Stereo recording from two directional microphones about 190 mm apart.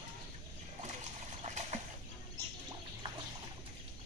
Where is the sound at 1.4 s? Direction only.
35° right (ahead or behind).